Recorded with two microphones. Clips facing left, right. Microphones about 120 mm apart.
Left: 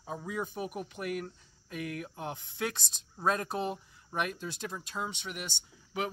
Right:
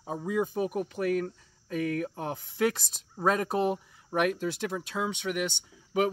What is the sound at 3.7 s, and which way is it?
Speech, 65° right (ahead or behind).